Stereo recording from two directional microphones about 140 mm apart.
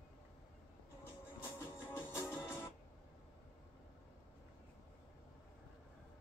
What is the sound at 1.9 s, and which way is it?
Music, 20° left (ahead or behind).